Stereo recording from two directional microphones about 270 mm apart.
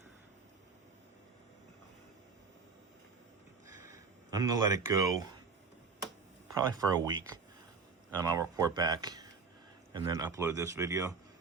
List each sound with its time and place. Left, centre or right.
3.8 s a sound: centre
6.5 s speech: centre
8.2 s speech: centre